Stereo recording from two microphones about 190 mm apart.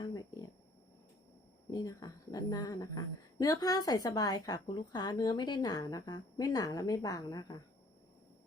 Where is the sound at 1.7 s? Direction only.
20° left (ahead or behind).